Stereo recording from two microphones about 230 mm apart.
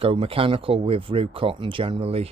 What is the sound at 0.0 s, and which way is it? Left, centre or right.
Speech, right.